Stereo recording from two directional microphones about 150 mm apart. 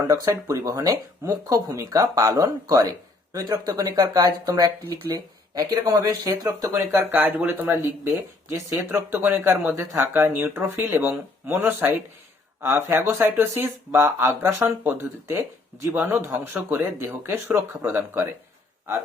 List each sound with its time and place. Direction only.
0.0 s speech: 20° right (ahead or behind)